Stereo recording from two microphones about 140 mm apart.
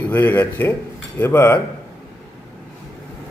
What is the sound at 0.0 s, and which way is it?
A man's voice, 15° left (ahead or behind).